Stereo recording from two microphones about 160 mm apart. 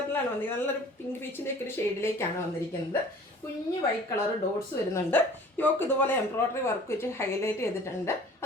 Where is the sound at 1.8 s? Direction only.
15° left (ahead or behind).